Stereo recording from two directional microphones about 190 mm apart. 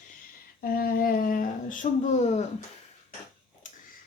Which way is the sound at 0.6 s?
50° left (ahead or behind).